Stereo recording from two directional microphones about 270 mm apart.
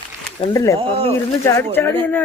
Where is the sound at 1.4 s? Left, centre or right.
Centre.